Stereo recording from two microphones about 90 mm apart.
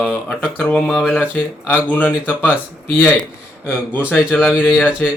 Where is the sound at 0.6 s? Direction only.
15° left (ahead or behind).